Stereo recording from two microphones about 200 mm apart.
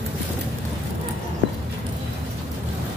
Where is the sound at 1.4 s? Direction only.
65° right (ahead or behind).